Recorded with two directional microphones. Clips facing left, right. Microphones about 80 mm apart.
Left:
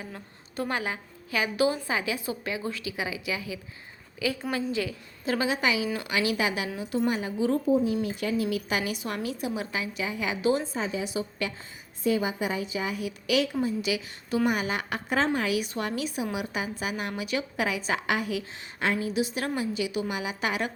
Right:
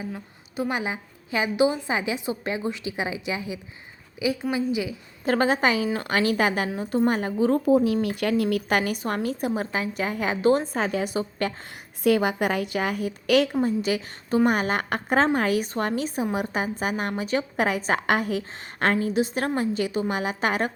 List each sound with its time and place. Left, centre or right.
0.0 s a woman's voice: centre
0.8 s a woman's voice: right
5.2 s a woman's voice: right
7.7 s a woman's voice: right
10.8 s a woman's voice: right
12.0 s a woman's voice: right
13.0 s a woman's voice: right